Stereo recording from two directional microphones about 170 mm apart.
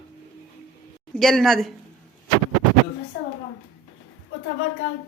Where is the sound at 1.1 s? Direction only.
Centre (ahead or behind).